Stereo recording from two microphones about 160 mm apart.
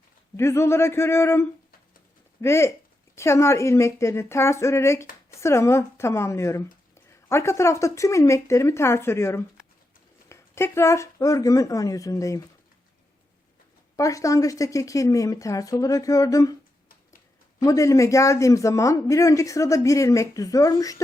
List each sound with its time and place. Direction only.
0.3 s a man's voice: 15° left (ahead or behind)
13.9 s a man's voice: 20° left (ahead or behind)
17.6 s a man's voice: 20° left (ahead or behind)